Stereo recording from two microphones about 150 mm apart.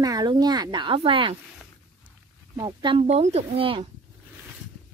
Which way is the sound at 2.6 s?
30° right (ahead or behind).